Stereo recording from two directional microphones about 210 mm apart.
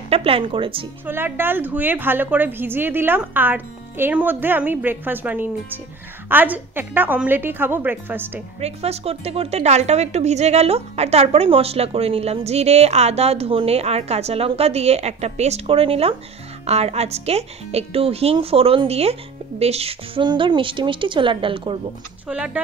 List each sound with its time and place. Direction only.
0.1 s speech: 25° right (ahead or behind)
1.0 s a woman's voice: 10° right (ahead or behind)
8.5 s speech: 30° right (ahead or behind)
22.3 s speech: 5° right (ahead or behind)